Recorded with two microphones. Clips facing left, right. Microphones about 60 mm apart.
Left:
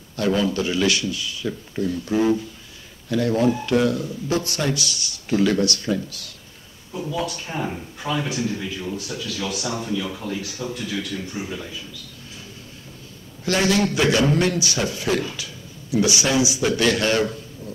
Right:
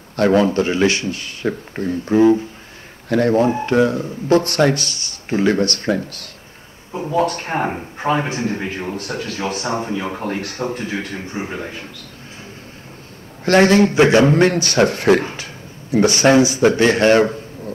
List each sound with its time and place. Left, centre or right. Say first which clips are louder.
0.1 s a man's voice: right 7 dB; right
13.5 s a man's voice: right 8 dB; right